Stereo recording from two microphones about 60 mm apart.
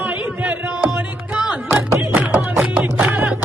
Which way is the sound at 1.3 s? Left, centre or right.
Centre.